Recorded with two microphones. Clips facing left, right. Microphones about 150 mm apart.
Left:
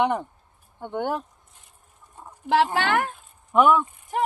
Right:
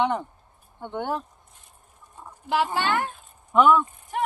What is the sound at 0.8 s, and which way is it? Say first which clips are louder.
Speech: left 2 dB; 10° left (ahead or behind).